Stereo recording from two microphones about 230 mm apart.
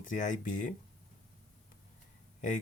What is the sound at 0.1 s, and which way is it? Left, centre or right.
Speech, left.